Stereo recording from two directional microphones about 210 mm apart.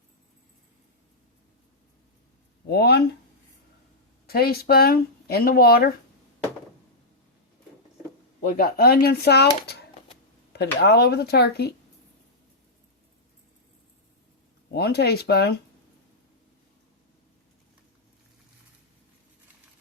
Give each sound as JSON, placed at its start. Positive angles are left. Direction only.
{"t": 2.6, "sound": "speech", "side_deg": 50}
{"t": 4.3, "sound": "speech", "side_deg": 45}
{"t": 8.4, "sound": "speech", "side_deg": 45}
{"t": 9.6, "sound": "a sound", "side_deg": 50}
{"t": 10.5, "sound": "speech", "side_deg": 50}
{"t": 14.7, "sound": "speech", "side_deg": 50}